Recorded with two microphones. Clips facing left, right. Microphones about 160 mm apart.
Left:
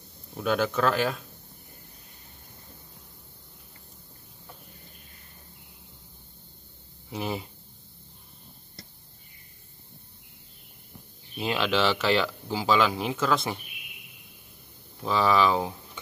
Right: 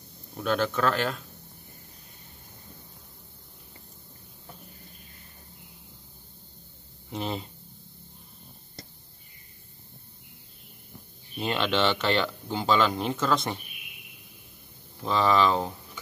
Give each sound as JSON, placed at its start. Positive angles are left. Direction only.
{"t": 0.4, "sound": "speech", "side_deg": 5}
{"t": 7.1, "sound": "speech", "side_deg": 5}
{"t": 11.3, "sound": "speech", "side_deg": 5}
{"t": 15.0, "sound": "speech", "side_deg": 5}